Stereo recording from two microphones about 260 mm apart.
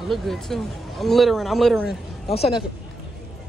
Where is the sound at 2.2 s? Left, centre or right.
Left.